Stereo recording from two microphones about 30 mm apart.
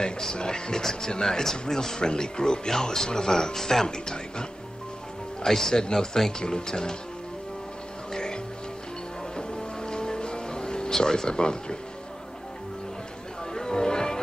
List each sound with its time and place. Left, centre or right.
0.4 s speech: left
2.0 s speech: left
3.8 s speech: left
5.4 s speech: centre
8.1 s music: left
9.4 s music: left
10.9 s speech: left
13.6 s music: left